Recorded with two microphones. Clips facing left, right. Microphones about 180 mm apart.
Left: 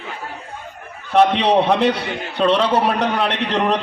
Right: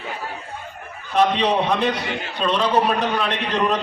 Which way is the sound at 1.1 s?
70° left (ahead or behind).